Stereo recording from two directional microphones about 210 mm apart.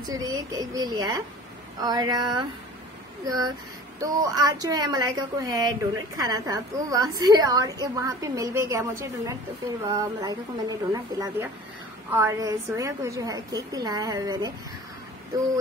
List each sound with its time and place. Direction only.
0.0 s a woman's voice: 20° right (ahead or behind)
1.8 s a sound: 20° right (ahead or behind)
4.0 s a woman's voice: 15° right (ahead or behind)